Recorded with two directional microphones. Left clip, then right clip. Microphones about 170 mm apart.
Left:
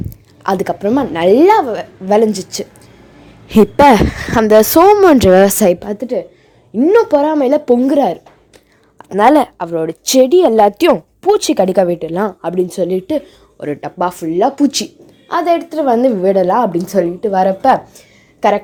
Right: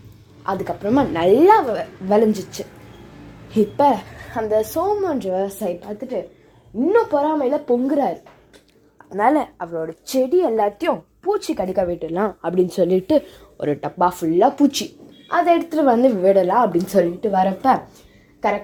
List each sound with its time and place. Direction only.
0.4 s a woman's voice: 60° left (ahead or behind)
0.9 s a woman's voice: 25° left (ahead or behind)
3.5 s a woman's voice: 50° left (ahead or behind)
9.8 s speech: 70° left (ahead or behind)
11.9 s a woman's voice: 25° left (ahead or behind)
12.5 s a woman's voice: 5° left (ahead or behind)
14.0 s speech: 15° left (ahead or behind)
14.5 s a woman's voice: 30° left (ahead or behind)
15.7 s a woman's voice: 5° left (ahead or behind)
16.0 s a woman's voice: 25° left (ahead or behind)
16.7 s speech: 15° left (ahead or behind)
17.2 s a woman's voice: 30° left (ahead or behind)
18.4 s a woman's voice: 50° left (ahead or behind)